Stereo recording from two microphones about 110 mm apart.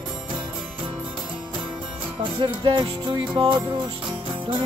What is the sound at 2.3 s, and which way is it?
Music, 45° right (ahead or behind).